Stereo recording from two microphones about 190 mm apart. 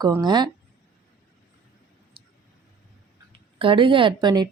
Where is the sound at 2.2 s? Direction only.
30° right (ahead or behind).